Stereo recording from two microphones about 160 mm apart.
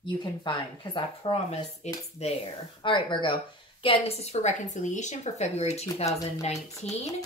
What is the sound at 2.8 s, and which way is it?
A woman's voice, 30° left (ahead or behind).